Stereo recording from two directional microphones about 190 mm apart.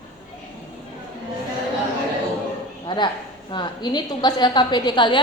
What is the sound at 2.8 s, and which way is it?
A woman's voice, 25° left (ahead or behind).